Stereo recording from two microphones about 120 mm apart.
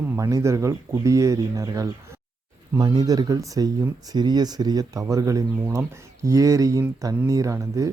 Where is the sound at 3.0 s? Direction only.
30° right (ahead or behind).